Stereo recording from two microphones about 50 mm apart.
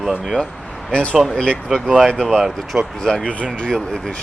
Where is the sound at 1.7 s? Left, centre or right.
Centre.